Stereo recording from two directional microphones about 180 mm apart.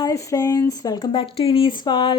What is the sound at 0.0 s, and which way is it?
A woman's voice, 20° left (ahead or behind).